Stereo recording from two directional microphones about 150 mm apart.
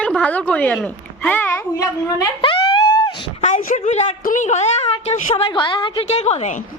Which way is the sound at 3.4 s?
50° left (ahead or behind).